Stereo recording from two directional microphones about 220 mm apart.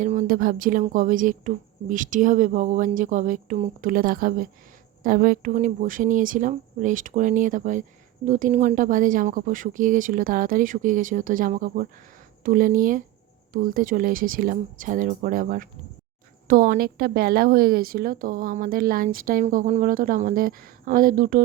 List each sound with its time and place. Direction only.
0.0 s speech: 35° right (ahead or behind)